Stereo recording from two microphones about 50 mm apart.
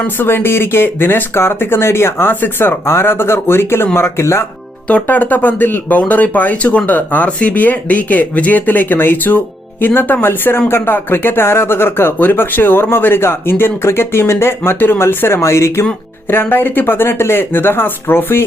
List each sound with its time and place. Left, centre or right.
0.2 s speech: left
5.0 s speech: left
6.0 s speech: left
6.8 s speech: left
7.3 s speech: left
16.3 s speech: left